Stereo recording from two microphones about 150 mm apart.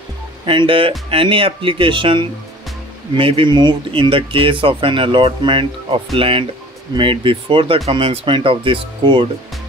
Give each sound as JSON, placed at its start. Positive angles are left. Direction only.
{"t": 0.5, "sound": "speech", "side_deg": -35}